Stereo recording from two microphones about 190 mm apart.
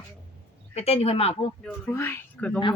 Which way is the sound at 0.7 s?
35° left (ahead or behind).